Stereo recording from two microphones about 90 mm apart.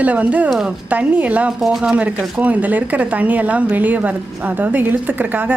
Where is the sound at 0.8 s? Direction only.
15° right (ahead or behind).